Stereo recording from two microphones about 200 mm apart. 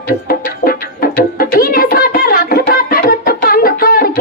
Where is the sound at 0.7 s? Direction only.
45° left (ahead or behind).